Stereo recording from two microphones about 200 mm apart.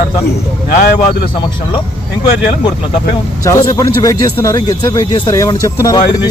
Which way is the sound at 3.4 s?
15° left (ahead or behind).